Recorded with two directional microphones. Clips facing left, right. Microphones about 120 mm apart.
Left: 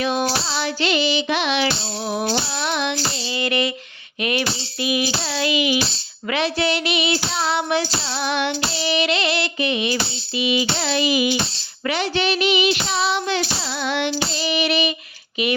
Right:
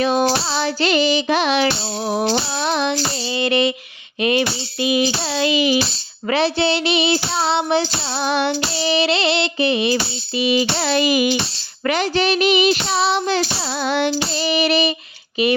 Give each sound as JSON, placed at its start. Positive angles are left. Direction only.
{"t": 0.0, "sound": "child singing", "side_deg": -35}
{"t": 4.2, "sound": "a sound", "side_deg": -30}
{"t": 6.2, "sound": "child singing", "side_deg": -35}